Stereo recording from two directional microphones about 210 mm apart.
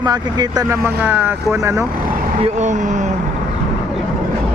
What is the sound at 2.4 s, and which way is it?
Speech, 35° right (ahead or behind).